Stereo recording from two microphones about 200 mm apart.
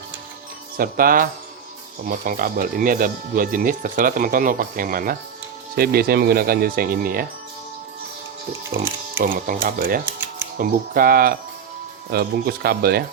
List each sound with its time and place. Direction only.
0.8 s speech: 45° right (ahead or behind)
9.2 s speech: 45° right (ahead or behind)